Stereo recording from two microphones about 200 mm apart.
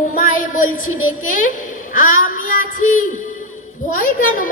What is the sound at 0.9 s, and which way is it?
Speech, 90° left.